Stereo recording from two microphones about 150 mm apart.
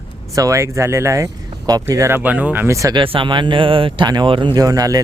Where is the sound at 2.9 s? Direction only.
35° right (ahead or behind).